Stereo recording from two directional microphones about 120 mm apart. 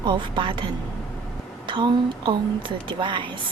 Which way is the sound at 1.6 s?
40° right (ahead or behind).